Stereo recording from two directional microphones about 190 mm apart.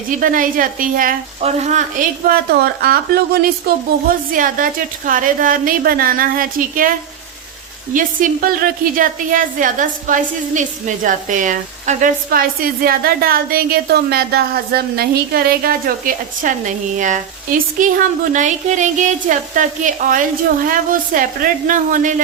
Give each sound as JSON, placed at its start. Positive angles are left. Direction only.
{"t": 0.1, "sound": "a woman's voice", "side_deg": -45}
{"t": 1.4, "sound": "a woman's voice", "side_deg": -35}
{"t": 7.9, "sound": "a woman's voice", "side_deg": -45}